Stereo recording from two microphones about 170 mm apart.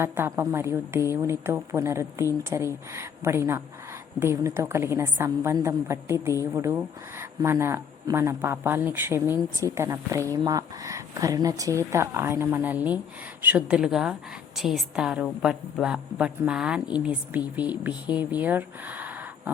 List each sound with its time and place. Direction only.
0.0 s a woman's voice: 15° right (ahead or behind)